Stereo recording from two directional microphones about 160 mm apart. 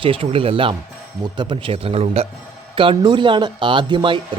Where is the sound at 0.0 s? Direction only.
35° right (ahead or behind).